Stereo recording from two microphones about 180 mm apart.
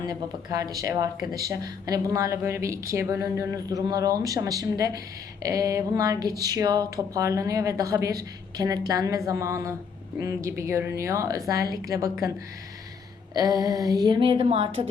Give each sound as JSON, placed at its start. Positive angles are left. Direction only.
{"t": 0.0, "sound": "a woman's voice", "side_deg": -20}
{"t": 13.3, "sound": "speech", "side_deg": -20}